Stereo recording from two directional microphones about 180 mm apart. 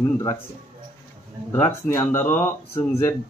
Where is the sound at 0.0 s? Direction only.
15° left (ahead or behind).